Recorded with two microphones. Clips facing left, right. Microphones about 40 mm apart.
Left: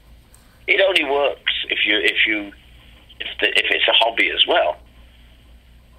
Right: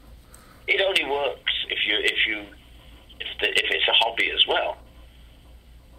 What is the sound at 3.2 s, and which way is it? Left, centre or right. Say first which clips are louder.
Speech: left 5 dB; left.